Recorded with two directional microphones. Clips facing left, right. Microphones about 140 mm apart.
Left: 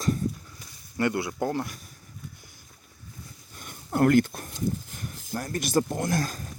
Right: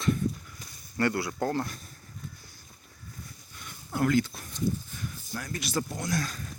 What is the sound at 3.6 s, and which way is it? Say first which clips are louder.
Speech: left 6 dB; 50° left (ahead or behind).